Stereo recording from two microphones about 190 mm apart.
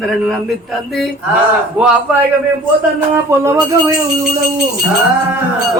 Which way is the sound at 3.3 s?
15° right (ahead or behind).